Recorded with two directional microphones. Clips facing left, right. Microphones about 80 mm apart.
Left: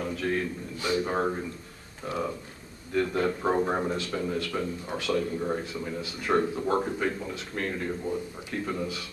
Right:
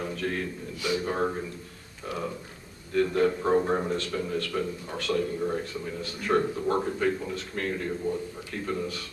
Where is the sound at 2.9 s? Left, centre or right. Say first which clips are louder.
Right 3 dB; centre.